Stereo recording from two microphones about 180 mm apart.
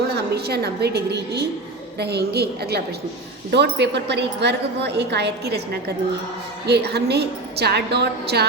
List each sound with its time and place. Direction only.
0.3 s a woman's voice: 65° right (ahead or behind)
6.7 s a woman's voice: 65° right (ahead or behind)